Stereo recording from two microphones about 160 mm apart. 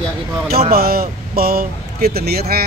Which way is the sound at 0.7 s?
70° right (ahead or behind).